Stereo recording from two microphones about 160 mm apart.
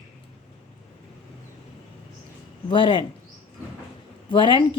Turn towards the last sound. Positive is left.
turn(degrees=30)  # may be behind; listen again after turning